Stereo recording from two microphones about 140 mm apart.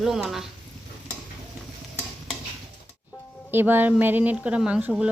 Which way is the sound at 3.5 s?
15° right (ahead or behind).